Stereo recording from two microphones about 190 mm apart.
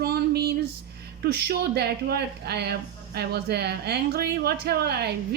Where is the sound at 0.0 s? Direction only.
55° right (ahead or behind).